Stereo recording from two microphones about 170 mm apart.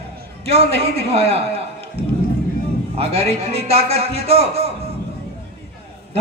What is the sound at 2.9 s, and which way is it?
A man's voice, 35° right (ahead or behind).